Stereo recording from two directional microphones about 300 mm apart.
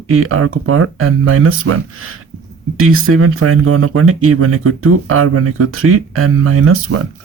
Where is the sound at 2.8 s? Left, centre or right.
Right.